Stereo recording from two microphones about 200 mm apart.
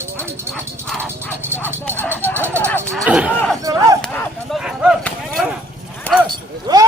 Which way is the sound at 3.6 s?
15° right (ahead or behind).